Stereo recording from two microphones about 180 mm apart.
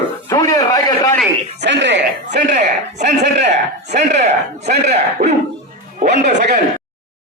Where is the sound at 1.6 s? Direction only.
75° right (ahead or behind).